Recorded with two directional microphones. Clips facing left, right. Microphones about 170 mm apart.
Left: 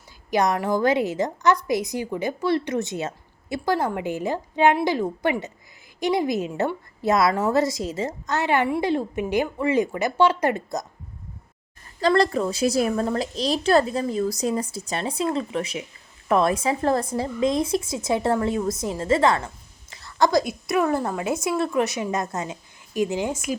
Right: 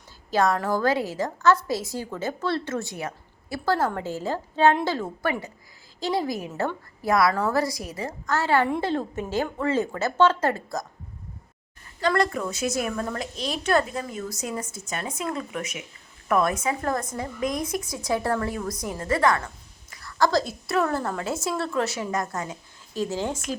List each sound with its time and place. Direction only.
0.3 s a woman's voice: 15° left (ahead or behind)
11.9 s a woman's voice: 35° left (ahead or behind); by 23.6 s 10° left (ahead or behind)